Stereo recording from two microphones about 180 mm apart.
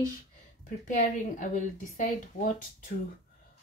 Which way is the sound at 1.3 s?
45° left (ahead or behind).